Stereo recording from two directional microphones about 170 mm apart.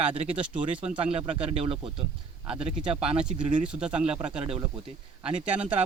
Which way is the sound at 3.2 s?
5° right (ahead or behind).